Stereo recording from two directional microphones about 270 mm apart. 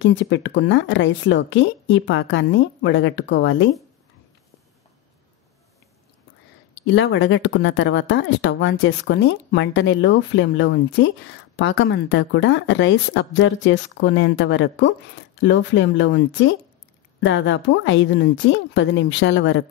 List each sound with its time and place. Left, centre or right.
0.0 s speech: left
6.9 s speech: left